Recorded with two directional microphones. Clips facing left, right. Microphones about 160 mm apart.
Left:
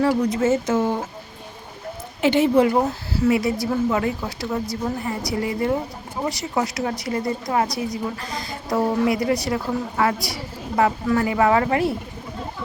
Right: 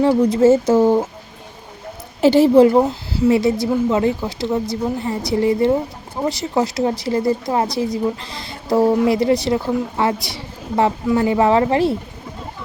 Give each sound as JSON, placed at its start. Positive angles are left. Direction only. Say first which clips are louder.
{"t": 0.0, "sound": "speech", "louder": "right 6 dB", "side_deg": -25}
{"t": 2.2, "sound": "a woman's voice", "louder": "right 6 dB", "side_deg": -35}